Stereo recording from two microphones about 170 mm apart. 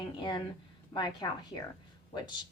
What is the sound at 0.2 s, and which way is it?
A woman's voice, 25° left (ahead or behind).